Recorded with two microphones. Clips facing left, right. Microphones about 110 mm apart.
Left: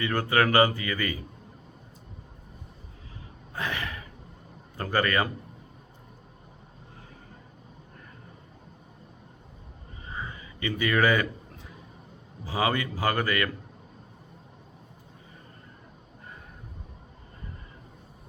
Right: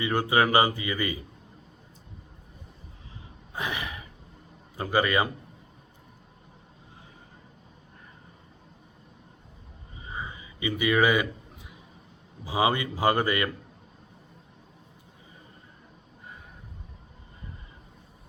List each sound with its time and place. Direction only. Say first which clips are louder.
0.0 s speech: right 1 dB; 15° right (ahead or behind)
3.5 s gasp: even; 15° right (ahead or behind)
4.8 s speech: right 1 dB; 10° right (ahead or behind)
10.1 s a sound: even; 15° right (ahead or behind)
12.5 s speech: right 2 dB; 20° right (ahead or behind)